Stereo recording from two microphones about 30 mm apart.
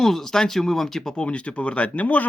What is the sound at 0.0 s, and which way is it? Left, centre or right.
Speech, centre.